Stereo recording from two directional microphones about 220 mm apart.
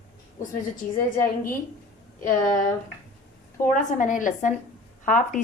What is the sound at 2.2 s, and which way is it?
Speech, 40° left (ahead or behind).